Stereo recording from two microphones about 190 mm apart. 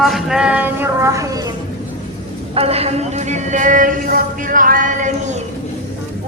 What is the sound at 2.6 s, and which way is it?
Speech, 30° right (ahead or behind).